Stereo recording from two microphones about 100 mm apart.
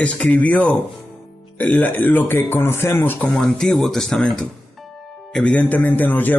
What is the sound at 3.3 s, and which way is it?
Speech, 5° left (ahead or behind).